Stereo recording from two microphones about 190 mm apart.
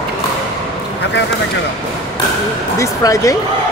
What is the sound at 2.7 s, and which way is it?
Speech, 15° left (ahead or behind).